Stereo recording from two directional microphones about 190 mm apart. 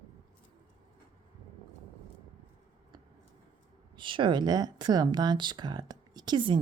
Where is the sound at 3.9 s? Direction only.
25° right (ahead or behind).